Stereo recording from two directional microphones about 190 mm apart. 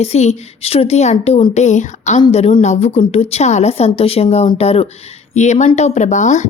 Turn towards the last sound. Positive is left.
turn(degrees=40)  # may be behind; listen again after turning